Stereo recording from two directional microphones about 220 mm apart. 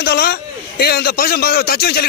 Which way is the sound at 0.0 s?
45° left (ahead or behind).